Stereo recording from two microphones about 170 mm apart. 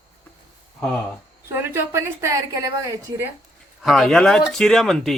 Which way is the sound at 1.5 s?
15° right (ahead or behind).